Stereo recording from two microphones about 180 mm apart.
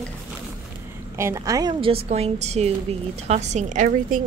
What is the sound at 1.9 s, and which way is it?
A woman's voice, 35° right (ahead or behind).